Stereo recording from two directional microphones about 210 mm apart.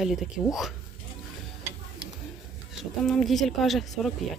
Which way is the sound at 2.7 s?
Centre (ahead or behind).